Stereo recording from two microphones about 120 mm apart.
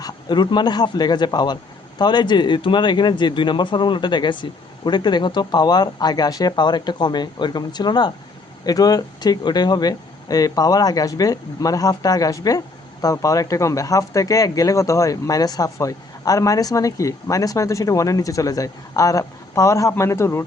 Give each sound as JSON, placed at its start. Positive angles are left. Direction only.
{"t": 0.0, "sound": "speech", "side_deg": 35}